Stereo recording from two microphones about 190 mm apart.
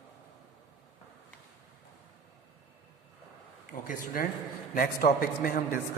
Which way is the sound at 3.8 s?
45° left (ahead or behind).